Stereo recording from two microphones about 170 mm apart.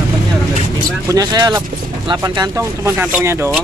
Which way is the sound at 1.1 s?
25° right (ahead or behind).